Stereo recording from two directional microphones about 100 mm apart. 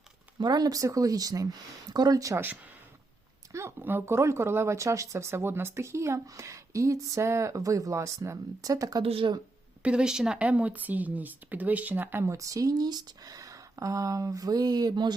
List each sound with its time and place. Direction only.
0.3 s speech: 45° right (ahead or behind)
3.5 s speech: 25° right (ahead or behind)
9.0 s speech: 65° right (ahead or behind)
9.8 s speech: 10° right (ahead or behind)
12.2 s speech: 30° right (ahead or behind)